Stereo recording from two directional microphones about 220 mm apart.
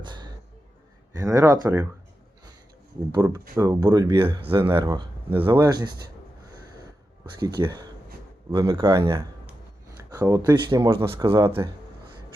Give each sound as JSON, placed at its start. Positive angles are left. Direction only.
{"t": 0.0, "sound": "music", "side_deg": -20}
{"t": 1.1, "sound": "speech", "side_deg": -15}
{"t": 3.1, "sound": "speech", "side_deg": -15}
{"t": 7.3, "sound": "speech", "side_deg": -15}